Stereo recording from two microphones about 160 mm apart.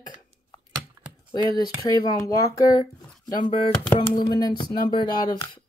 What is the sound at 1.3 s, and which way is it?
Speech, 25° left (ahead or behind).